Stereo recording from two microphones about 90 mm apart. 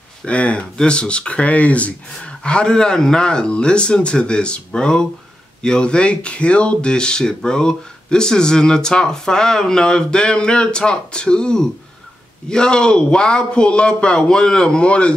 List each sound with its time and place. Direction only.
0.2 s speech: 15° left (ahead or behind)